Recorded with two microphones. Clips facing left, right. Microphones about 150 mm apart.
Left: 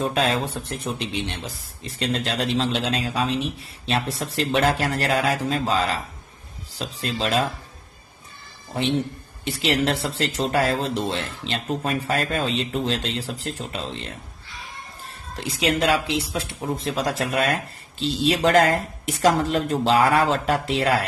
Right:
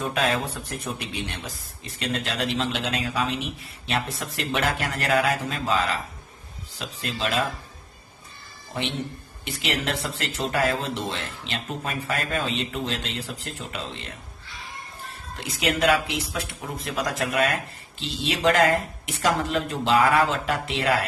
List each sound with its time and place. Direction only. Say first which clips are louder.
0.0 s speech: left 3 dB; 30° left (ahead or behind)
9.4 s speech: left 6 dB; 35° left (ahead or behind)
15.4 s speech: left 1 dB; 30° left (ahead or behind)